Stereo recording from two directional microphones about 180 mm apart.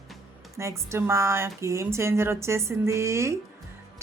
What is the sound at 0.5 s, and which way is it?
A woman's voice, 15° right (ahead or behind).